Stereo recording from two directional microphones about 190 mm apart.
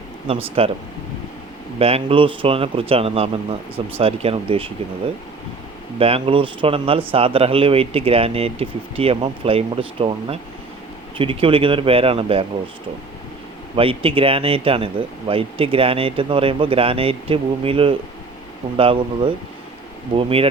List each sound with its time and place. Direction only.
0.3 s speech: 30° right (ahead or behind)
1.8 s speech: 30° right (ahead or behind)
6.0 s speech: 30° right (ahead or behind)
13.7 s speech: 30° right (ahead or behind)